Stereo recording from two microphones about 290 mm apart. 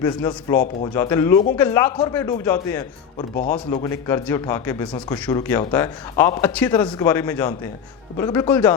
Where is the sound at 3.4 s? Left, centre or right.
Left.